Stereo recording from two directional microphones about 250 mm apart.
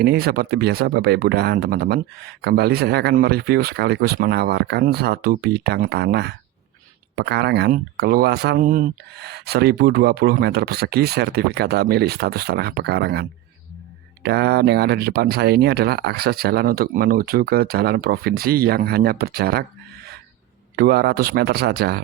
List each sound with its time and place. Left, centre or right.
0.0 s speech: right
20.7 s speech: right